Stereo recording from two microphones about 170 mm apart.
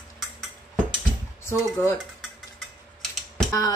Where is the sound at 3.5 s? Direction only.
20° left (ahead or behind).